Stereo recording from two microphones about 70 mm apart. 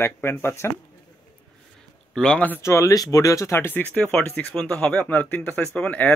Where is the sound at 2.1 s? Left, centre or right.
Centre.